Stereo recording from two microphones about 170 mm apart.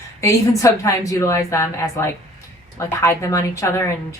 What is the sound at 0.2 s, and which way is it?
A woman's voice, 20° left (ahead or behind).